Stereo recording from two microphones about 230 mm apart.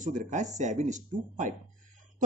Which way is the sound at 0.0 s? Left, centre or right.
Right.